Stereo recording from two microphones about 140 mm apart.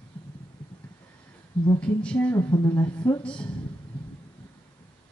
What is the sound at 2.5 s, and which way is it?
Speech, 30° left (ahead or behind).